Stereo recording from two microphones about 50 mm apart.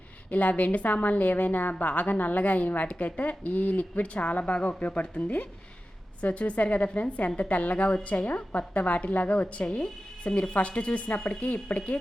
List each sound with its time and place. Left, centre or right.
0.3 s a woman's voice: left